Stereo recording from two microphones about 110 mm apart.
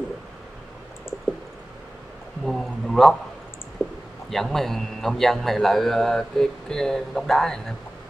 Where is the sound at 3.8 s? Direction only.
5° left (ahead or behind).